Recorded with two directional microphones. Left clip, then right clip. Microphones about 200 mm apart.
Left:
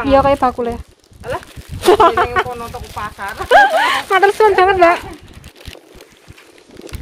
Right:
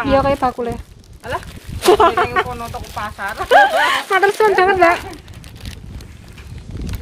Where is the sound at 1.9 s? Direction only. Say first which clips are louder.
Left 2 dB; 15° left (ahead or behind).